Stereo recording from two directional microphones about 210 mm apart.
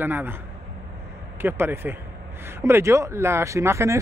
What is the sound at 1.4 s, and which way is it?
Speech, 10° right (ahead or behind).